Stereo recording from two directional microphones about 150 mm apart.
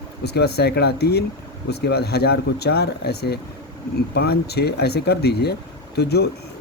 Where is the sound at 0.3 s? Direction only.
90° left.